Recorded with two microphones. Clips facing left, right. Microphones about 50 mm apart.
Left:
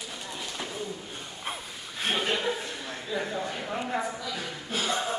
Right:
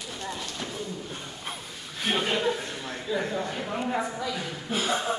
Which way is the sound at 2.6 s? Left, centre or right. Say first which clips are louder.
Right 2 dB; right.